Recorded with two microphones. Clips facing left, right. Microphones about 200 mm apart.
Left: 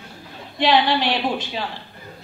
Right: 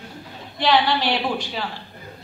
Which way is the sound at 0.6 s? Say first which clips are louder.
Left 1 dB; 20° left (ahead or behind).